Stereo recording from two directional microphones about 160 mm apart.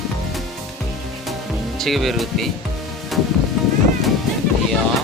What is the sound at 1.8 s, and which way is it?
Speech, centre (ahead or behind).